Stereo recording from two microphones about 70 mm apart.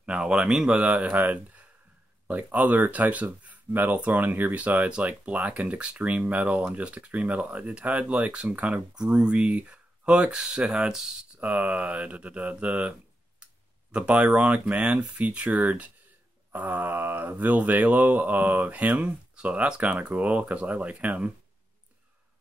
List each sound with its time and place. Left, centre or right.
0.0 s speech: centre
11.3 s speech: right
13.9 s speech: centre